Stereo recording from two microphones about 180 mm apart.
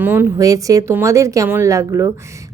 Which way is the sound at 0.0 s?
10° right (ahead or behind).